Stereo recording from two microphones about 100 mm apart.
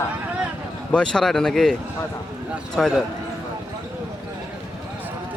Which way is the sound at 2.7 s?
Centre (ahead or behind).